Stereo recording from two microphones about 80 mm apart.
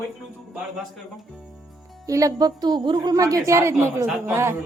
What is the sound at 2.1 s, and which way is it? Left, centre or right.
A woman's voice, right.